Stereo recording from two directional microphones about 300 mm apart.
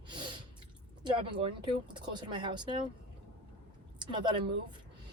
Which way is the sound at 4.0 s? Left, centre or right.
Centre.